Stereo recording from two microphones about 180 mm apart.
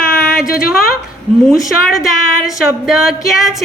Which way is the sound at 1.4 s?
Centre (ahead or behind).